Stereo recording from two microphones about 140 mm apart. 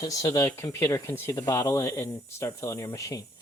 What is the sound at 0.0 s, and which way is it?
Speech, 25° left (ahead or behind).